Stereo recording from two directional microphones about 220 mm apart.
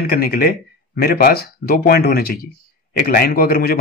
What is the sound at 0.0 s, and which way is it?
Speech, 45° left (ahead or behind).